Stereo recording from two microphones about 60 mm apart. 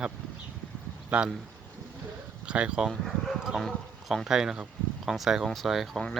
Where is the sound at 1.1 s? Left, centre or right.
Centre.